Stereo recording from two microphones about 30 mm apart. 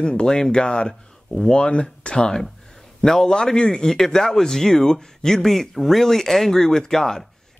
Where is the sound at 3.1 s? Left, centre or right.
Centre.